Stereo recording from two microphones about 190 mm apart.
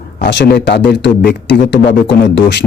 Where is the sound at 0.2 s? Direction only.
65° left (ahead or behind).